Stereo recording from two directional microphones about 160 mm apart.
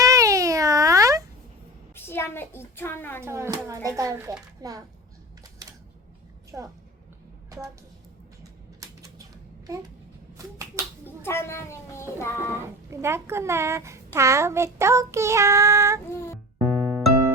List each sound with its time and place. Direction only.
0.0 s meow: 20° right (ahead or behind)
2.0 s a woman's voice: 15° left (ahead or behind)
3.2 s a child's voice: 15° right (ahead or behind)
5.6 s camera: 25° right (ahead or behind)
6.5 s speech: 20° right (ahead or behind)
8.8 s typewriter: 20° right (ahead or behind)
11.0 s speech: 15° left (ahead or behind)
12.9 s a child's voice: 15° right (ahead or behind)
16.7 s music: 5° right (ahead or behind)